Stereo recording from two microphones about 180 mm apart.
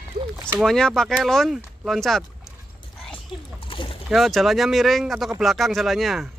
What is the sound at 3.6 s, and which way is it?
Boat, 30° left (ahead or behind).